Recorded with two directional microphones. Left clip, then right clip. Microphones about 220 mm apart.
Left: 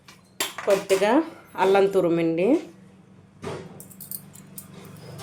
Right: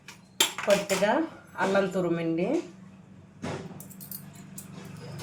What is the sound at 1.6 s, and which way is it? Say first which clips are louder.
Speech: left 7 dB; 45° left (ahead or behind).